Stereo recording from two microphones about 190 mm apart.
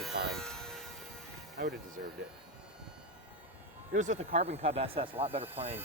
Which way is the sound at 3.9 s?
40° right (ahead or behind).